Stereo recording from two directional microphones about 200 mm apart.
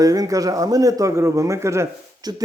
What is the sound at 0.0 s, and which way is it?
A man's voice, 20° right (ahead or behind).